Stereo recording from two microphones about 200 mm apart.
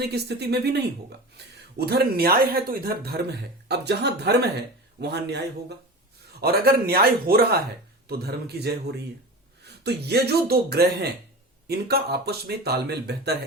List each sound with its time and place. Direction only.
0.1 s a man's voice: 55° right (ahead or behind)